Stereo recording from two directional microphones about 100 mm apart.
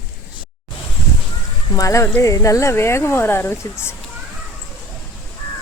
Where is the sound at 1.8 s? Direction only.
30° left (ahead or behind).